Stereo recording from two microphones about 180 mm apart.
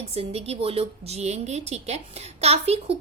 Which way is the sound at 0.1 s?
35° right (ahead or behind).